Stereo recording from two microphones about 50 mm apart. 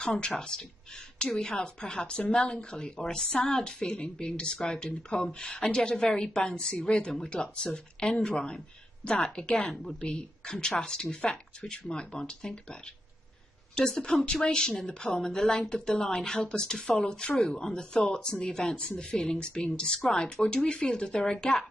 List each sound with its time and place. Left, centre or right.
0.3 s speech: centre
11.1 s speech: left
13.7 s speech: centre